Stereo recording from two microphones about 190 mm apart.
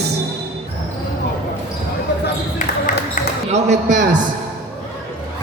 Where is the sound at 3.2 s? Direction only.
40° left (ahead or behind).